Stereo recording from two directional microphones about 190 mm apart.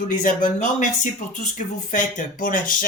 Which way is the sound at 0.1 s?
45° left (ahead or behind).